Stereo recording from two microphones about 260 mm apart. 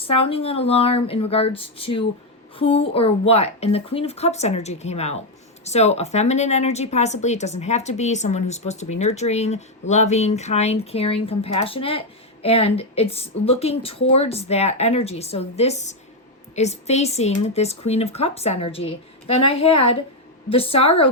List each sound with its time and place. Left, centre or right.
0.0 s a woman's voice: left